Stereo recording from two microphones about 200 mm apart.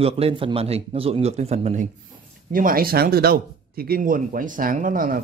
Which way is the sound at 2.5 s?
45° right (ahead or behind).